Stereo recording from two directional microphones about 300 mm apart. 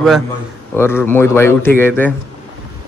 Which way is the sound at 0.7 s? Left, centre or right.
Centre.